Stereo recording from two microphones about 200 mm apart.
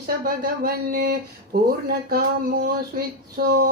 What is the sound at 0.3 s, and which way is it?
Speech, 45° right (ahead or behind).